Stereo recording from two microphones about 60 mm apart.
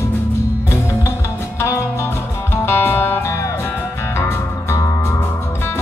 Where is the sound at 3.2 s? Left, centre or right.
Left.